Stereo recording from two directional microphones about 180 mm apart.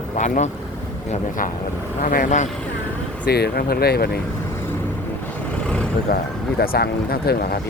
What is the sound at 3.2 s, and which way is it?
Speech, 60° left (ahead or behind).